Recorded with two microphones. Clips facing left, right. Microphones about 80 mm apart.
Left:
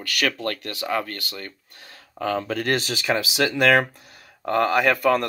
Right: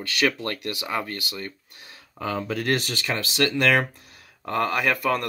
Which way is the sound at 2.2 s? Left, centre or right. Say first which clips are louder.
Left 3 dB; centre.